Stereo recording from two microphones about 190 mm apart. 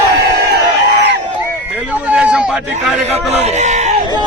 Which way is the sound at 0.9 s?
65° right (ahead or behind).